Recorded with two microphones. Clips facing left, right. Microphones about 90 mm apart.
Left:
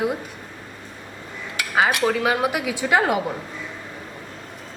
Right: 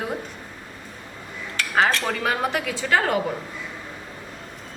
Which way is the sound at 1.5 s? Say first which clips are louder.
Even; 10° left (ahead or behind).